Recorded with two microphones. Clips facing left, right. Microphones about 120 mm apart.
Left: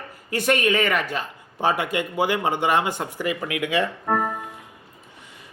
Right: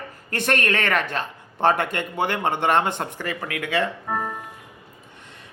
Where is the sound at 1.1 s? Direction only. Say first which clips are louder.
Right 1 dB; 5° left (ahead or behind).